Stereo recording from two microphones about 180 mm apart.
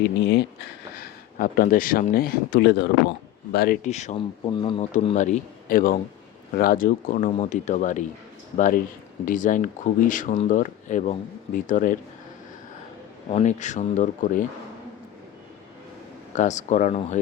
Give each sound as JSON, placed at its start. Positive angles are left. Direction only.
{"t": 0.0, "sound": "speech", "side_deg": 65}
{"t": 0.9, "sound": "speech", "side_deg": 55}
{"t": 3.8, "sound": "speech", "side_deg": 40}
{"t": 4.9, "sound": "speech", "side_deg": 40}
{"t": 13.3, "sound": "speech", "side_deg": 40}
{"t": 16.3, "sound": "speech", "side_deg": 40}